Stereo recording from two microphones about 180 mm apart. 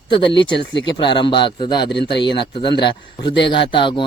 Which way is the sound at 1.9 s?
70° left (ahead or behind).